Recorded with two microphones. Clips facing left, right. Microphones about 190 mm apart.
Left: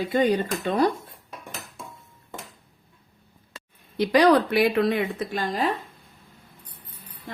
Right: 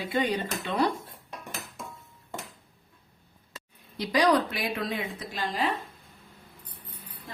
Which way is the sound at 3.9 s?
60° left (ahead or behind).